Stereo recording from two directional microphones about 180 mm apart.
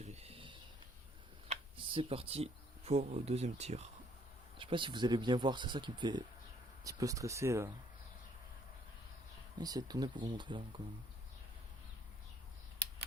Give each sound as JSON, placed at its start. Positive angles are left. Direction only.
{"t": 0.0, "sound": "a sound", "side_deg": -35}
{"t": 1.5, "sound": "speech", "side_deg": -30}
{"t": 9.6, "sound": "speech", "side_deg": -20}